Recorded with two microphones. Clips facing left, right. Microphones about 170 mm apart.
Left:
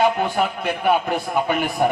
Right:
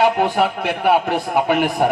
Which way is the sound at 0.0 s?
75° right (ahead or behind).